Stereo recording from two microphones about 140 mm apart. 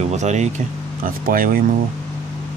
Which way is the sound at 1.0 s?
90° right.